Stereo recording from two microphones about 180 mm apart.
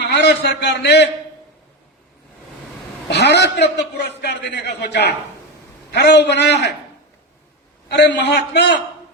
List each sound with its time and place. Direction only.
0.0 s a man's voice: 70° left (ahead or behind)
3.1 s a man's voice: 70° left (ahead or behind)
7.9 s a man's voice: 70° left (ahead or behind)